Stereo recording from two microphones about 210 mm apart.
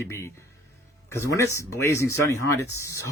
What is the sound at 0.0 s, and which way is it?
Speech, 15° left (ahead or behind).